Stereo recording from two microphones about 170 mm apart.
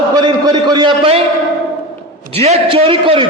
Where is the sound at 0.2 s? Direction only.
25° right (ahead or behind).